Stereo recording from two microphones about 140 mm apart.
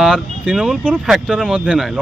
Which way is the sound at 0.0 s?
Centre (ahead or behind).